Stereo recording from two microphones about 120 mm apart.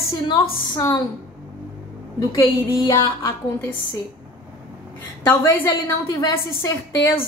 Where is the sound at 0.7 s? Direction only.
30° left (ahead or behind).